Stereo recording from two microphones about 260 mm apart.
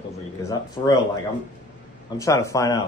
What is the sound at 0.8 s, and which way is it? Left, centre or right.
Speech, centre.